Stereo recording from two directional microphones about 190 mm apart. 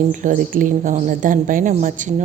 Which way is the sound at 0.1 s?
45° right (ahead or behind).